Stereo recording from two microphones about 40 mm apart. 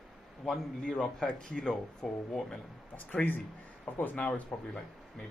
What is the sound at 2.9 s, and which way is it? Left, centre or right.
Speech, left.